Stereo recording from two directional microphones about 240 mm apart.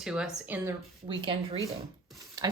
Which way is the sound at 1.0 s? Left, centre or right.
Right.